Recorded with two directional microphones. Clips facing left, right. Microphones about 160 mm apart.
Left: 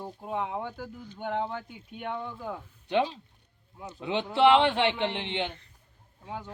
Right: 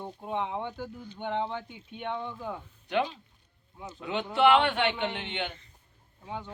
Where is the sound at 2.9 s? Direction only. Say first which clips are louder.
Left 2 dB; 30° left (ahead or behind).